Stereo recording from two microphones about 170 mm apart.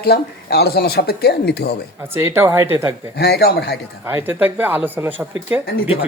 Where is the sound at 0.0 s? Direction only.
70° left (ahead or behind).